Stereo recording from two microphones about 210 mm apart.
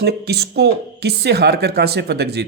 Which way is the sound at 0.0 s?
50° right (ahead or behind).